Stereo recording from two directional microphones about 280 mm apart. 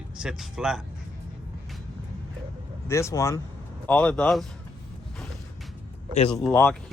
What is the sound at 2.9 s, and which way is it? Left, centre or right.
Speech, centre.